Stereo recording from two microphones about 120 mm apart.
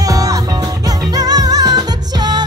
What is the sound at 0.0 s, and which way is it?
Music, 30° right (ahead or behind).